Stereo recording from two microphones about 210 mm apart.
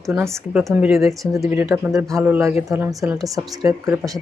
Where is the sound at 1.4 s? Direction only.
10° right (ahead or behind).